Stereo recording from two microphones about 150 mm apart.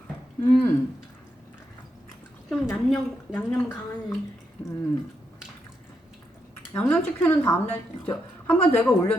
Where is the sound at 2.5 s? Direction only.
Centre (ahead or behind).